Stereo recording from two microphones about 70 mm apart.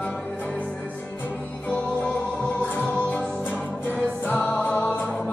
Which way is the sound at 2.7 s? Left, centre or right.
Left.